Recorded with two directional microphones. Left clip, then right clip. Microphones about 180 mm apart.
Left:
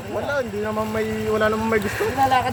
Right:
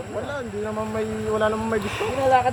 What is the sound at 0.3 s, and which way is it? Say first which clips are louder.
Speech: left 5 dB; 45° left (ahead or behind).